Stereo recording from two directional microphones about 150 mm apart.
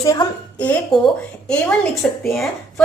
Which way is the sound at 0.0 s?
25° left (ahead or behind).